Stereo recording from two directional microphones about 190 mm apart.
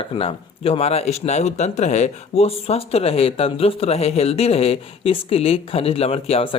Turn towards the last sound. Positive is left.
turn(degrees=30)  # may be behind; listen again after turning